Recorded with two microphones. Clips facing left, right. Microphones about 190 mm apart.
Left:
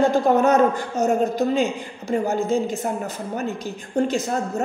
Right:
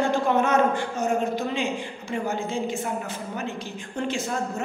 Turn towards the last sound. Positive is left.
turn(degrees=40)  # may be behind; listen again after turning